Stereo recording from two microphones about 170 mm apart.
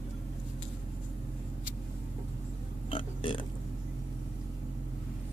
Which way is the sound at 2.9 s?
30° left (ahead or behind).